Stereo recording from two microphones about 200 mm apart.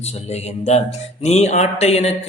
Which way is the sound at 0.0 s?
30° left (ahead or behind).